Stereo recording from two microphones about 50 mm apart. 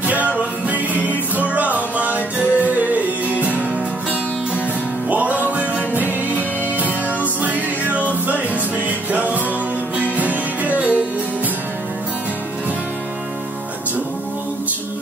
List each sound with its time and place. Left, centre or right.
0.0 s music: right
5.1 s music: right